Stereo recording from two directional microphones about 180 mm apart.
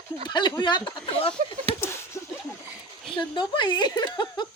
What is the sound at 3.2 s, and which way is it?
Speech, 25° left (ahead or behind).